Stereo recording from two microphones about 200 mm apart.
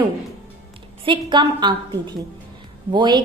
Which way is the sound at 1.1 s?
25° right (ahead or behind).